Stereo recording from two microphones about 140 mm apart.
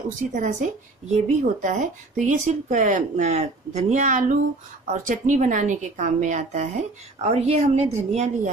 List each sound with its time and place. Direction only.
0.3 s speech: 60° right (ahead or behind)